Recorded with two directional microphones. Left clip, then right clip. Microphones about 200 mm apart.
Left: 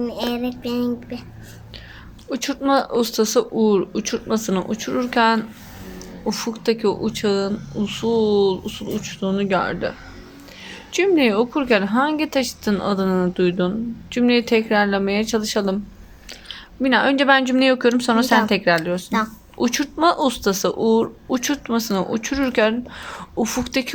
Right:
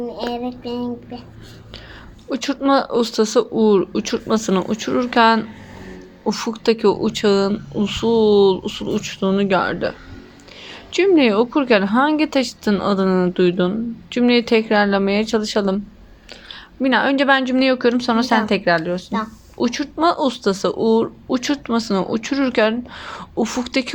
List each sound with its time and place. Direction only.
0.0 s speech: 50° left (ahead or behind)
2.3 s a woman's voice: 10° right (ahead or behind)